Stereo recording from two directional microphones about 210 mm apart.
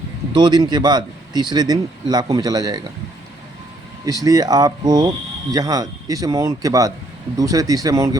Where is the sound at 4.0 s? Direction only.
15° right (ahead or behind).